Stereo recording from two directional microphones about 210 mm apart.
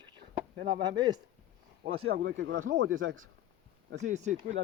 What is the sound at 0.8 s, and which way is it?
Speech, 20° right (ahead or behind).